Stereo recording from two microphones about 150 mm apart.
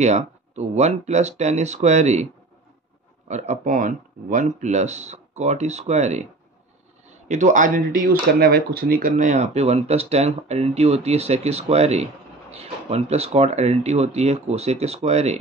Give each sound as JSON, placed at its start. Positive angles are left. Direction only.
{"t": 0.0, "sound": "speech", "side_deg": -50}
{"t": 3.3, "sound": "speech", "side_deg": -50}